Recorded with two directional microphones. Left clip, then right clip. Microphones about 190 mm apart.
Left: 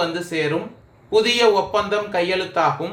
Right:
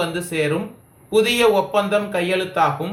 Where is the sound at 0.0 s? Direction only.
35° left (ahead or behind).